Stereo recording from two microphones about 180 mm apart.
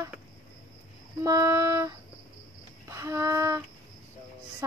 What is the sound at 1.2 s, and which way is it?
Speech, 15° right (ahead or behind).